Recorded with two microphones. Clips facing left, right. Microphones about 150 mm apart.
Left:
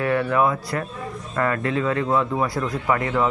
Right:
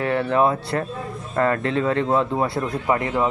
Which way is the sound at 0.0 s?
30° right (ahead or behind).